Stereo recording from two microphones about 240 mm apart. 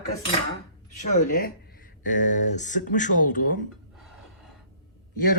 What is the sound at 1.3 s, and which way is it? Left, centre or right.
Speech, left.